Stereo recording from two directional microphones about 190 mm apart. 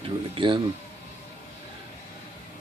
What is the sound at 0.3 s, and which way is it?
Speech, 25° right (ahead or behind).